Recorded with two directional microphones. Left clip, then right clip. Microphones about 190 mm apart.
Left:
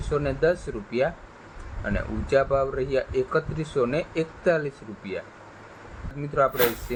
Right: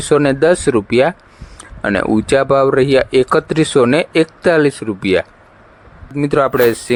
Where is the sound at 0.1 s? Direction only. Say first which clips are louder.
Right 12 dB; 65° right (ahead or behind).